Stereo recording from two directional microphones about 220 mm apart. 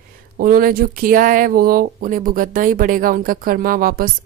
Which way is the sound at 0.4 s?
40° right (ahead or behind).